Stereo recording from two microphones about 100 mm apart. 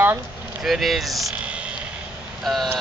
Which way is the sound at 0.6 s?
Centre (ahead or behind).